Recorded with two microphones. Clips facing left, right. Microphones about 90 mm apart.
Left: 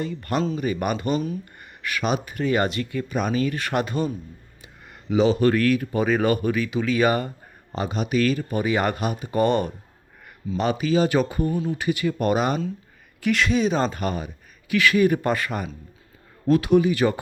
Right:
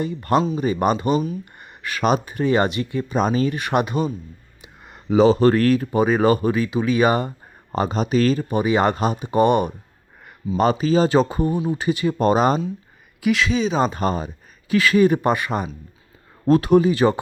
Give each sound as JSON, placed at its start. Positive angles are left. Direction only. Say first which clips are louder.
{"t": 0.0, "sound": "speech", "louder": "right 5 dB", "side_deg": -25}
{"t": 1.5, "sound": "a sound", "louder": "right 1 dB", "side_deg": -25}
{"t": 2.0, "sound": "speech", "louder": "right 5 dB", "side_deg": -40}
{"t": 2.2, "sound": "speech", "louder": "right 3 dB", "side_deg": -25}
{"t": 4.6, "sound": "a sound", "louder": "right 5 dB", "side_deg": -20}
{"t": 5.0, "sound": "speech", "louder": "right 4 dB", "side_deg": -35}
{"t": 7.7, "sound": "speech", "louder": "right 4 dB", "side_deg": -40}
{"t": 10.6, "sound": "speech", "louder": "right 4 dB", "side_deg": -35}
{"t": 13.1, "sound": "speech", "louder": "right 2 dB", "side_deg": -5}
{"t": 13.9, "sound": "speech", "louder": "right 5 dB", "side_deg": -35}
{"t": 16.5, "sound": "speech", "louder": "right 3 dB", "side_deg": -40}